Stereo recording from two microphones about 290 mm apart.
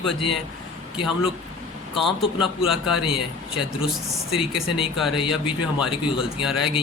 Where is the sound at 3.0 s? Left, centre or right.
Centre.